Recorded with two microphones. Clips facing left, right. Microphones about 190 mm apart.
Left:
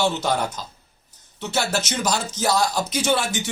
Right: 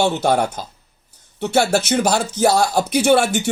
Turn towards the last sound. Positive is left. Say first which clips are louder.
# right 7 dB
turn(degrees=-60)  # may be behind; listen again after turning